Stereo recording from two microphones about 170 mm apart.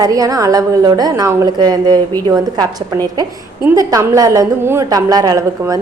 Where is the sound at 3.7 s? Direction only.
15° right (ahead or behind).